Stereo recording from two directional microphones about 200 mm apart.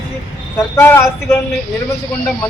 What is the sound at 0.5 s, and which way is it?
Speech, 10° left (ahead or behind).